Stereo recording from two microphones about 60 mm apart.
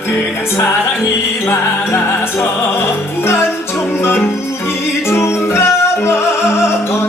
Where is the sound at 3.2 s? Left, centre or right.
Left.